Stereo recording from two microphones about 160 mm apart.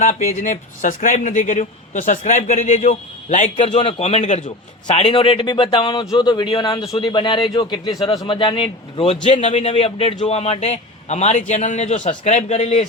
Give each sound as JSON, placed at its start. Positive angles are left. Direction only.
{"t": 0.0, "sound": "a man's voice", "side_deg": 50}